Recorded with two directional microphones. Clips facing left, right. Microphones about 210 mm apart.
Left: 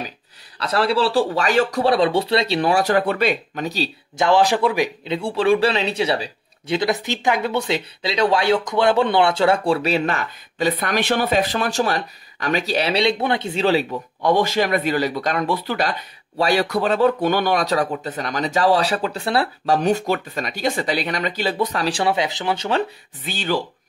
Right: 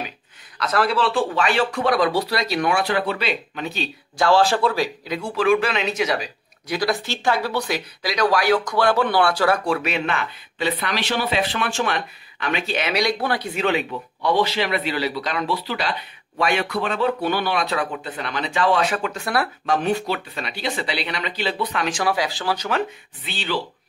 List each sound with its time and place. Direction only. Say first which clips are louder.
0.6 s speech: left 2 dB; 30° left (ahead or behind)
4.2 s speech: left 1 dB; 15° left (ahead or behind)
23.2 s speech: left 3 dB; 45° left (ahead or behind)